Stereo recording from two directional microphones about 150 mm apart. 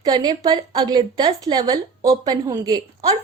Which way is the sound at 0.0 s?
30° right (ahead or behind).